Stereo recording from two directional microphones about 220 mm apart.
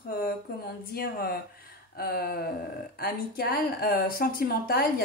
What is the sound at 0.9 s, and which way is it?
Speech, 45° left (ahead or behind).